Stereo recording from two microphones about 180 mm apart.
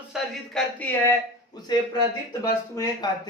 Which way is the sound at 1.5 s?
20° left (ahead or behind).